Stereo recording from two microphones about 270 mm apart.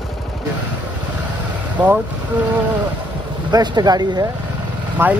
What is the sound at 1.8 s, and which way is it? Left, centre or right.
Speech, centre.